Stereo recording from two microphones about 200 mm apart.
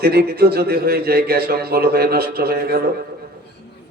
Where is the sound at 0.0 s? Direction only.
50° right (ahead or behind).